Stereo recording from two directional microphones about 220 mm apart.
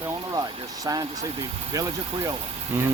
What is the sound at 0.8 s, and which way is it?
Speech, 15° right (ahead or behind).